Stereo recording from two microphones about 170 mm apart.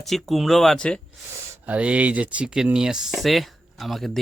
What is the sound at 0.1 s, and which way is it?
Speech, centre (ahead or behind).